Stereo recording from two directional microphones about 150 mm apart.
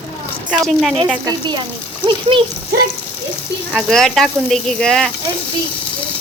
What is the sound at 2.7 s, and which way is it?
Speech, 85° right.